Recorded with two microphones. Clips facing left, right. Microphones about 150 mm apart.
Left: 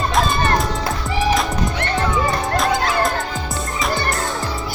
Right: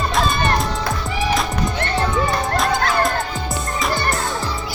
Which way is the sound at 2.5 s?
Centre (ahead or behind).